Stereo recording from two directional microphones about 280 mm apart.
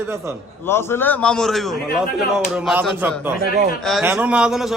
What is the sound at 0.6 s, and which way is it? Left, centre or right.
Speech, centre.